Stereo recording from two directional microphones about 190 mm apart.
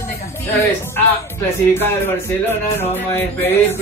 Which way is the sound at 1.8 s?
10° left (ahead or behind).